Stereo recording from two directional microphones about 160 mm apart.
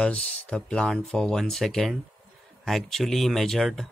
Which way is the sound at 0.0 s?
5° left (ahead or behind).